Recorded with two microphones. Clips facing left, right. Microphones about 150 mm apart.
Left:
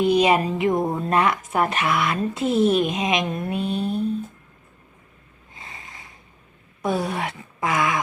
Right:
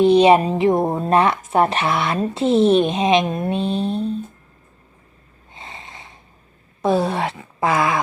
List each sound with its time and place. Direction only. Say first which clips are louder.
0.0 s speech: right 6 dB; 25° right (ahead or behind)
5.5 s snort: right 4 dB; 25° right (ahead or behind)
6.8 s speech: right 6 dB; 30° right (ahead or behind)